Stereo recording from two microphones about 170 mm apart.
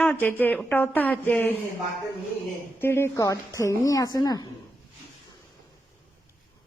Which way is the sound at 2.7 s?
15° left (ahead or behind).